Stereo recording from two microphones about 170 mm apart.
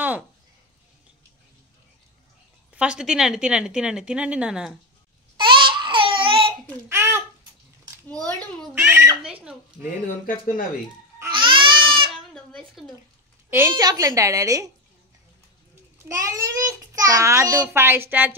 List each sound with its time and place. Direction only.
2.7 s a woman's voice: 5° right (ahead or behind)
5.4 s babbling: 30° right (ahead or behind)
6.7 s a child's voice: 15° right (ahead or behind)
8.1 s a woman's voice: 5° left (ahead or behind)
8.7 s a child's voice: 15° right (ahead or behind)
10.2 s speech: 55° left (ahead or behind)
11.3 s baby cry: 30° right (ahead or behind)
12.8 s a woman's voice: centre (ahead or behind)
13.5 s a child's voice: 15° right (ahead or behind)
16.1 s a child's voice: 20° right (ahead or behind)